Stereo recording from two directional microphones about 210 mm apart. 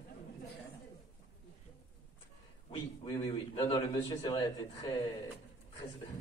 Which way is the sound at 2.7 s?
20° left (ahead or behind).